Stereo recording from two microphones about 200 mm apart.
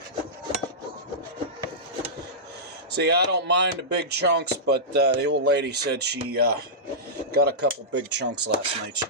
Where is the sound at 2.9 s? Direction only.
55° right (ahead or behind).